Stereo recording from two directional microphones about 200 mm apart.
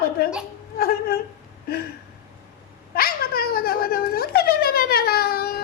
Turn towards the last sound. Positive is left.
turn(degrees=50)  # may be behind; listen again after turning